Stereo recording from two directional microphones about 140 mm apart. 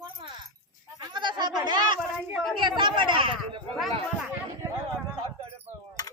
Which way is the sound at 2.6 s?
35° right (ahead or behind).